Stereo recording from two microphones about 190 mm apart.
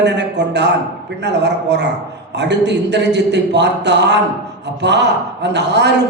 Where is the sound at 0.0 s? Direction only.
65° right (ahead or behind).